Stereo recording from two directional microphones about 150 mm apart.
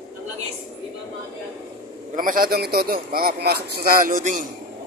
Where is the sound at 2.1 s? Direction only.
65° right (ahead or behind).